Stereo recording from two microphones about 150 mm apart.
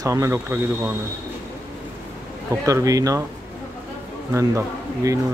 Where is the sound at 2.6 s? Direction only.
20° right (ahead or behind).